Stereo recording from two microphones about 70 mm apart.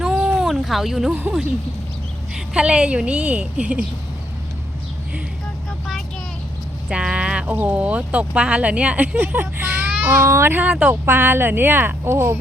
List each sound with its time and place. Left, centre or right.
0.0 s a sound: centre
2.3 s a woman's voice: centre
6.8 s speech: centre; by 10.6 s right
10.6 s speech: centre
11.0 s speech: right